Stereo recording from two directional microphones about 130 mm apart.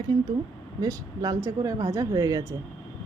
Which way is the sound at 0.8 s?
25° right (ahead or behind).